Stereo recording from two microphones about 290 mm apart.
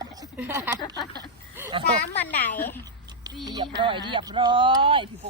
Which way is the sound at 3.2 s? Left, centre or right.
Centre.